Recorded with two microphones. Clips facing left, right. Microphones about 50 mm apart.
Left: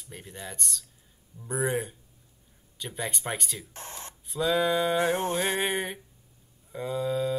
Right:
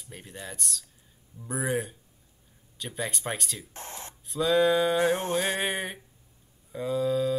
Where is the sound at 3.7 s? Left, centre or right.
Right.